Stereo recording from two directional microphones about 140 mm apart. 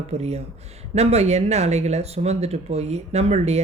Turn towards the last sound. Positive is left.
turn(degrees=-50)  # may be behind; listen again after turning